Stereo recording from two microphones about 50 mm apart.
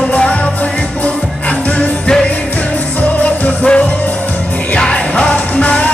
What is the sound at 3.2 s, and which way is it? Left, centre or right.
Music, left.